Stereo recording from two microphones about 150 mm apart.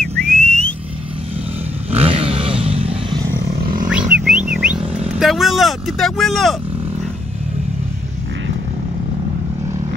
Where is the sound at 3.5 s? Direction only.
80° right.